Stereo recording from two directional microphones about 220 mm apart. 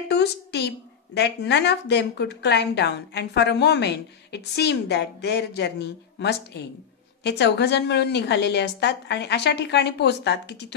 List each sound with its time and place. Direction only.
0.1 s a woman's voice: 50° left (ahead or behind)